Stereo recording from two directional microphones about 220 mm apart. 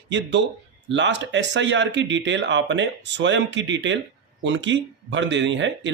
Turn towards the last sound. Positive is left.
turn(degrees=-55)  # may be behind; listen again after turning